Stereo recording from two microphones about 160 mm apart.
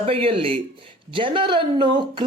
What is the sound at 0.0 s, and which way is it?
A woman's voice, 35° right (ahead or behind).